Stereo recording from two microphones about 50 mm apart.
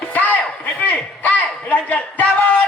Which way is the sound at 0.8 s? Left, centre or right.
Left.